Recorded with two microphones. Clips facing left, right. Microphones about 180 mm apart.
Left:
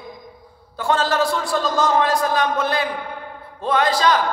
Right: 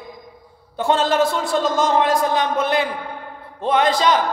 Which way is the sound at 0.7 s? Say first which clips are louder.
Right 2 dB; 25° right (ahead or behind).